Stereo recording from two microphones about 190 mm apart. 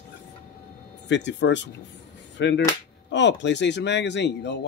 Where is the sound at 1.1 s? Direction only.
70° left (ahead or behind).